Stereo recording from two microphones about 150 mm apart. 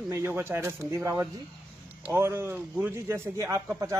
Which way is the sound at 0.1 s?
15° right (ahead or behind).